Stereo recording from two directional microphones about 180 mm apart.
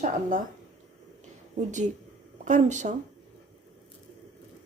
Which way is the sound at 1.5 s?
40° right (ahead or behind).